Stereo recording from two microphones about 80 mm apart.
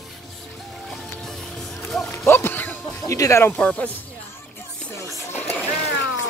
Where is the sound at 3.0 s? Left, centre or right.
Left.